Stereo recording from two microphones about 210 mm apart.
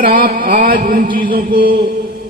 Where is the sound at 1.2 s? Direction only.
40° right (ahead or behind).